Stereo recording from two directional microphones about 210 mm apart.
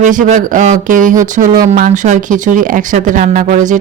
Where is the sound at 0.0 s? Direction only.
35° right (ahead or behind).